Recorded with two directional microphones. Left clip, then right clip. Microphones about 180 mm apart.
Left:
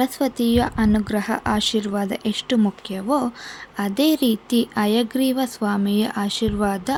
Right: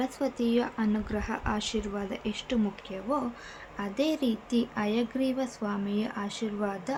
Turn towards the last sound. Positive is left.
turn(degrees=50)  # may be behind; listen again after turning